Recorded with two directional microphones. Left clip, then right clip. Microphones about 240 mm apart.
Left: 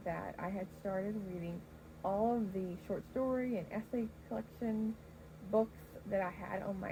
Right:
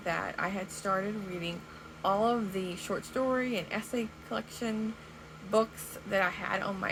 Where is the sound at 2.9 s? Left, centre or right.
Centre.